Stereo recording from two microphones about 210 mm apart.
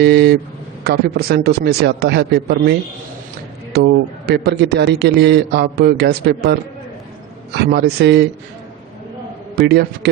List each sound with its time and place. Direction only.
0.0 s a man's voice: 50° right (ahead or behind)
9.6 s a man's voice: 50° right (ahead or behind)